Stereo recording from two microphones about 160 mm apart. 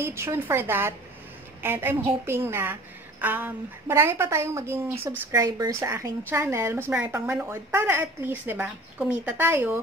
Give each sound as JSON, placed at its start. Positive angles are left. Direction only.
{"t": 0.0, "sound": "a woman's voice", "side_deg": -15}